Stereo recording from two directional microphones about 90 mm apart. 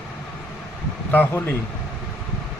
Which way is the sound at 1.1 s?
20° left (ahead or behind).